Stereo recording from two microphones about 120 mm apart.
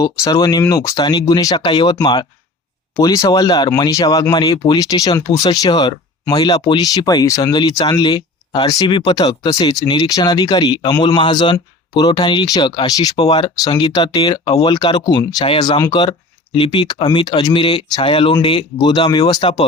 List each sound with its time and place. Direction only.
0.7 s speech: 30° left (ahead or behind)
16.5 s speech: 45° left (ahead or behind)
19.4 s speech: 50° left (ahead or behind)